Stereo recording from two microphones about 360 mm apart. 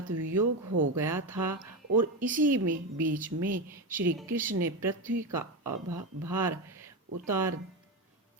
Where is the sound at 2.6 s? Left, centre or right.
Right.